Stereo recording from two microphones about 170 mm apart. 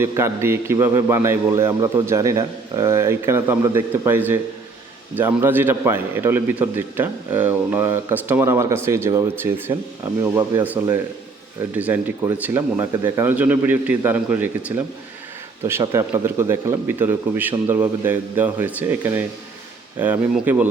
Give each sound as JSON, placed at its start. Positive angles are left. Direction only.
{"t": 0.0, "sound": "a man's voice", "side_deg": -15}